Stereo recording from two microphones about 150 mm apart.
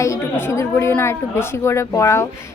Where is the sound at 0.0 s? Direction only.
20° left (ahead or behind).